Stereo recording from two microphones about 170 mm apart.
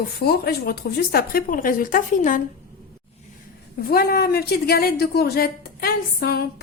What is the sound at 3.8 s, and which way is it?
A woman's voice, 65° left (ahead or behind).